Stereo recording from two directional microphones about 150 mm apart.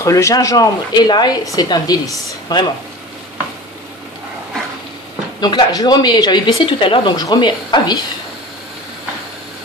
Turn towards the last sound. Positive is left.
turn(degrees=30)  # may be behind; listen again after turning